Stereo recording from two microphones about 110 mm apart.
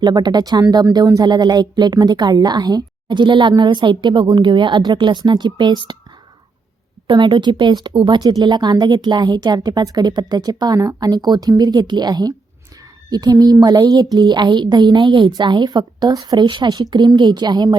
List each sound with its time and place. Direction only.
0.0 s speech: 40° right (ahead or behind)
7.1 s a woman's voice: 45° right (ahead or behind)